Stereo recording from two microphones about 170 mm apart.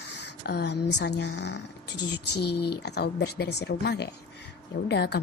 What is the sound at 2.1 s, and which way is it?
A woman's voice, 75° left (ahead or behind).